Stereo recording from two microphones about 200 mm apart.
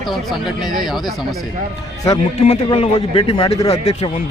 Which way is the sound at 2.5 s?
30° left (ahead or behind).